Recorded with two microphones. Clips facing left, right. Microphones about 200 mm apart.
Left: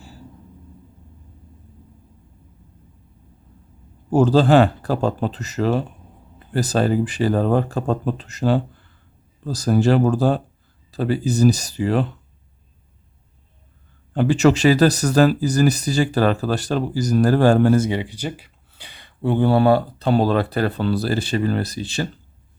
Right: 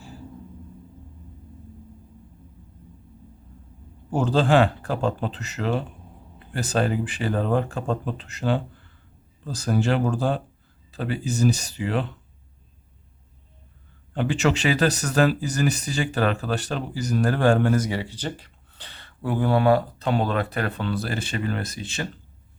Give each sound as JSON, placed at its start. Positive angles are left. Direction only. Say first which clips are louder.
{"t": 4.1, "sound": "speech", "louder": "left 6 dB", "side_deg": 40}
{"t": 14.1, "sound": "speech", "louder": "left 7 dB", "side_deg": 40}
{"t": 19.2, "sound": "speech", "louder": "left 5 dB", "side_deg": 25}